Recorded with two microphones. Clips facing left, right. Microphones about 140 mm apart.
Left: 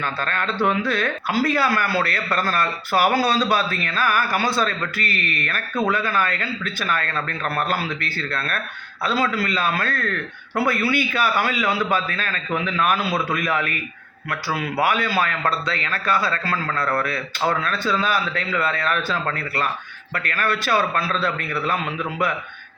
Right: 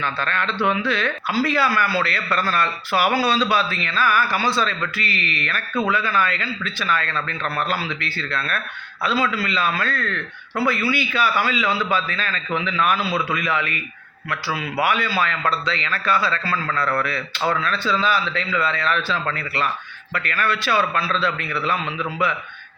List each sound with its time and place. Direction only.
0.0 s a man's voice: 45° left (ahead or behind)